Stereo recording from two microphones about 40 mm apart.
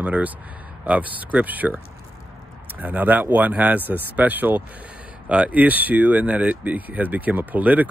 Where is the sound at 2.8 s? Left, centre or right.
Right.